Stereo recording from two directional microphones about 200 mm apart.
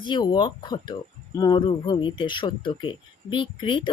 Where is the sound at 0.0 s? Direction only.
20° left (ahead or behind).